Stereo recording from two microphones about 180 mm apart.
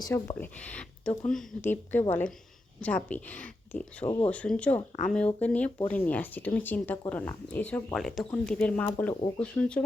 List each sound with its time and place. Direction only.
0.0 s speech: 15° left (ahead or behind)
4.0 s speech: 30° left (ahead or behind)
4.3 s speech: 5° left (ahead or behind)